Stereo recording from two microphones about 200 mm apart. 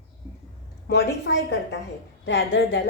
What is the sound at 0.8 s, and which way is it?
A woman's voice, 60° left (ahead or behind).